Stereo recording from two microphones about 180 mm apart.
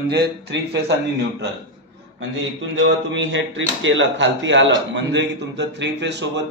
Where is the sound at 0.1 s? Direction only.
70° right (ahead or behind).